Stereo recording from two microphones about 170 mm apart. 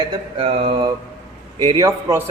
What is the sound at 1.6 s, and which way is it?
Speech, 20° right (ahead or behind).